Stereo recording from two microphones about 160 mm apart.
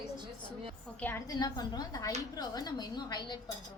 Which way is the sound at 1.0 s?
15° left (ahead or behind).